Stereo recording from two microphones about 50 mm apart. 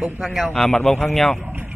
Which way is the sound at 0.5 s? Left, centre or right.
Centre.